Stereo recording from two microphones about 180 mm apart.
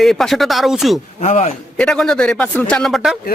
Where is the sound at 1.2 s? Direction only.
40° left (ahead or behind).